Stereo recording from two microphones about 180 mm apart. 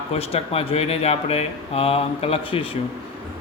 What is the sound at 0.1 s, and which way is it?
Speech, 35° left (ahead or behind).